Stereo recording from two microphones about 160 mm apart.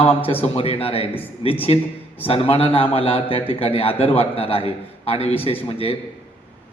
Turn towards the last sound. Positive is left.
turn(degrees=35)  # may be behind; listen again after turning